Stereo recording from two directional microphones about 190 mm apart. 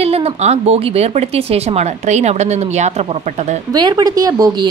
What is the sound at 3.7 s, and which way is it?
Speech, 20° right (ahead or behind).